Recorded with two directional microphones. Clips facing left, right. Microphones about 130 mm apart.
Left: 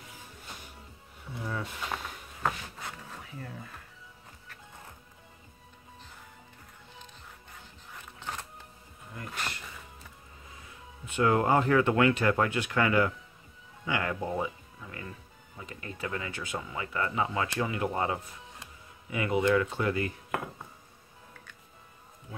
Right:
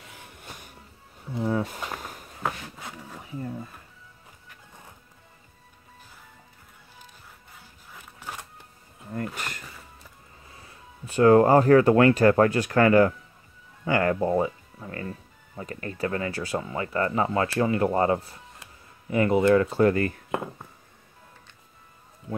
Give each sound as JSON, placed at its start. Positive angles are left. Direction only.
{"t": 1.3, "sound": "speech", "side_deg": -30}
{"t": 1.6, "sound": "a sound", "side_deg": -45}
{"t": 2.4, "sound": "a sound", "side_deg": -10}
{"t": 3.3, "sound": "speech", "side_deg": -20}
{"t": 9.1, "sound": "bee", "side_deg": -50}
{"t": 11.1, "sound": "speech", "side_deg": -35}
{"t": 15.0, "sound": "music", "side_deg": -35}
{"t": 16.0, "sound": "speech", "side_deg": -40}
{"t": 20.3, "sound": "speech", "side_deg": -25}